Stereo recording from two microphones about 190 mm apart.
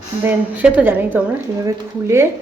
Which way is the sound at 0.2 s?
10° right (ahead or behind).